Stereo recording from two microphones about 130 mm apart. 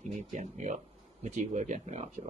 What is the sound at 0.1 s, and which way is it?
Speech, 70° right (ahead or behind).